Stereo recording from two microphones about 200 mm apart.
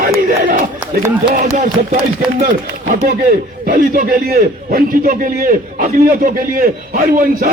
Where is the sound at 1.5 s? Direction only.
40° right (ahead or behind).